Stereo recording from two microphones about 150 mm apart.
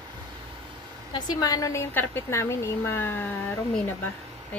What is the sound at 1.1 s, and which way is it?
A woman's voice, 25° left (ahead or behind).